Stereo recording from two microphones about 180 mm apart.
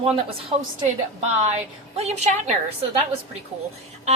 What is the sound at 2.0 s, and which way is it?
Speech, 35° right (ahead or behind).